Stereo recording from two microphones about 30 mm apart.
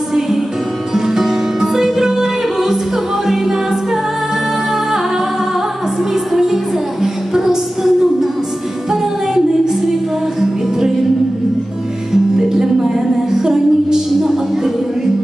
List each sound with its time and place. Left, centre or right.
0.9 s music: centre
6.3 s music: centre
12.4 s music: centre